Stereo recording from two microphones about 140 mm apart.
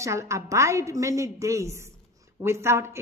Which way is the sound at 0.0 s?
20° right (ahead or behind).